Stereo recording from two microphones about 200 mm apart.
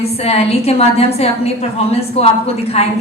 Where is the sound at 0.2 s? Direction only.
30° left (ahead or behind).